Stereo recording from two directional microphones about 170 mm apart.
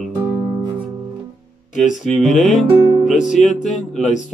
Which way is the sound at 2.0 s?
Centre (ahead or behind).